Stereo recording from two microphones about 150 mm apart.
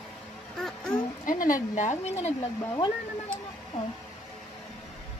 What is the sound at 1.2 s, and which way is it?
A woman's voice, 65° left (ahead or behind).